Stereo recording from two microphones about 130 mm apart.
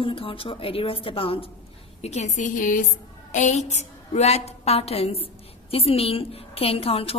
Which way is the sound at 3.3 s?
70° left (ahead or behind).